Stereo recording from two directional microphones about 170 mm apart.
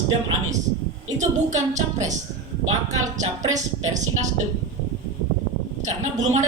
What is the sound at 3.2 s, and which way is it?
Speech, 45° right (ahead or behind).